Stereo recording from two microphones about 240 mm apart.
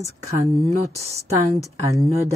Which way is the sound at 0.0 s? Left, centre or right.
Centre.